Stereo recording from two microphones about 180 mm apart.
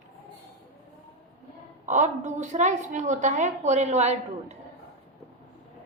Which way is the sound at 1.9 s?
40° right (ahead or behind).